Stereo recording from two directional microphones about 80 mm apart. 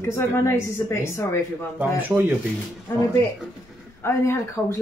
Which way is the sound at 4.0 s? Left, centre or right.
Left.